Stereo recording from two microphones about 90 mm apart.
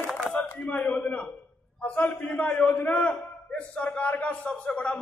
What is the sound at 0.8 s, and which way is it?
A man's voice, 15° left (ahead or behind).